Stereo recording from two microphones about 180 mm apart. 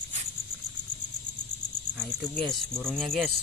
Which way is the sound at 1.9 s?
5° left (ahead or behind).